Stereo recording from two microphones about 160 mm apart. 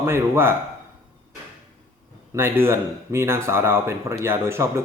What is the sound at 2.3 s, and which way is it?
Speech, 15° right (ahead or behind).